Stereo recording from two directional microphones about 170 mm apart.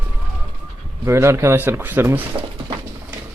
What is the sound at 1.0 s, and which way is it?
A man's voice, 15° right (ahead or behind).